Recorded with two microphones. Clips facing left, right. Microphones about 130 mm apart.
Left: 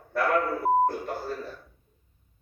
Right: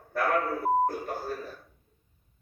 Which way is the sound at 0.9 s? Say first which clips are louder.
Left 1 dB; 45° right (ahead or behind).